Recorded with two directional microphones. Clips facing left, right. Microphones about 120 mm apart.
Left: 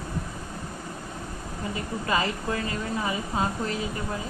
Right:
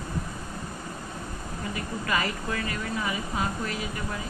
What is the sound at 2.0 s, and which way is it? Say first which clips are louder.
Speech: left 2 dB; 25° left (ahead or behind).